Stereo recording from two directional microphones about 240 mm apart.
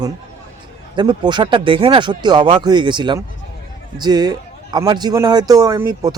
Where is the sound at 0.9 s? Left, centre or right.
Centre.